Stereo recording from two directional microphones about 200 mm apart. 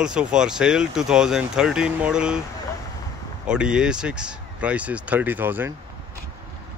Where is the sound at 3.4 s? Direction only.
5° right (ahead or behind).